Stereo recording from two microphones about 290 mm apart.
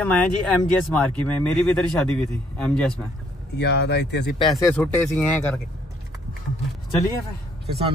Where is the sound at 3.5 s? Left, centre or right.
Left.